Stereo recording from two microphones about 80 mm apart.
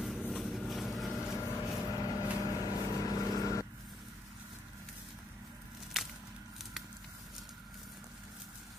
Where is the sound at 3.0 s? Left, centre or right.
Left.